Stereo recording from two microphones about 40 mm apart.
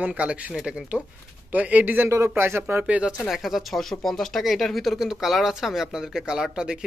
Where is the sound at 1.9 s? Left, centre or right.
Right.